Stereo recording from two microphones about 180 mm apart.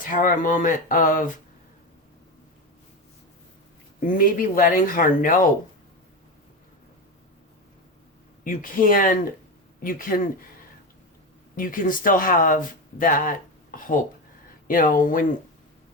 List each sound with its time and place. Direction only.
0.0 s speech: 50° left (ahead or behind)
4.0 s speech: 50° left (ahead or behind)
8.4 s speech: 50° left (ahead or behind)
11.5 s speech: 50° left (ahead or behind)